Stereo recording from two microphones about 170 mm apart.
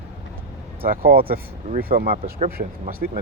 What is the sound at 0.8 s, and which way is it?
Speech, 60° right (ahead or behind).